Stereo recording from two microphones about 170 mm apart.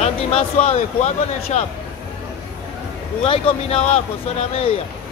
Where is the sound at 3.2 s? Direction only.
35° left (ahead or behind).